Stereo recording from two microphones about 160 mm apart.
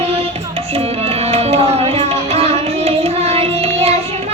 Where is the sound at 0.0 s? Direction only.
40° right (ahead or behind).